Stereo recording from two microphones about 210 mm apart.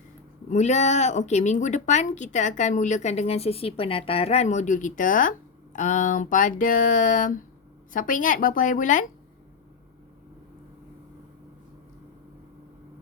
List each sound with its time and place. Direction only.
0.5 s speech: 35° left (ahead or behind)